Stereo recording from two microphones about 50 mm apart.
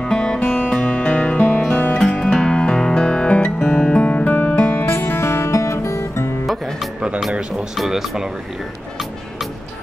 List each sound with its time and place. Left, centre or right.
0.0 s music: centre; by 1.6 s left
2.0 s music: centre
4.6 s music: left
7.7 s speech: centre